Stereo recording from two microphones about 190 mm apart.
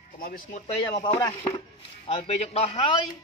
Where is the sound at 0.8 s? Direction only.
25° left (ahead or behind).